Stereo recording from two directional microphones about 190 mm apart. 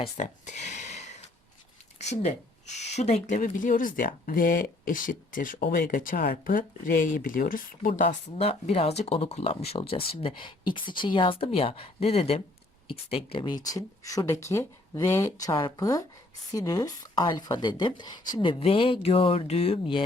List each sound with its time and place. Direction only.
0.0 s speech: 40° left (ahead or behind)
2.2 s speech: 35° left (ahead or behind)
8.0 s speech: 35° left (ahead or behind)